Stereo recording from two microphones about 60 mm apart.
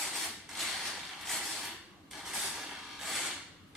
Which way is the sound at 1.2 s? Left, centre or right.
Centre.